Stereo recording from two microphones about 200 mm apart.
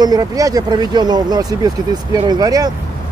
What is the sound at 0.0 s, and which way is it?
Speech, 20° right (ahead or behind).